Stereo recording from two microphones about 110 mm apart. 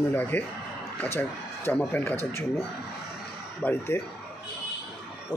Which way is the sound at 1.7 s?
15° left (ahead or behind).